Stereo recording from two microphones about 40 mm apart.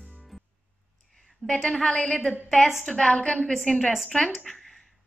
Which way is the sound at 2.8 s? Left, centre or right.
Centre.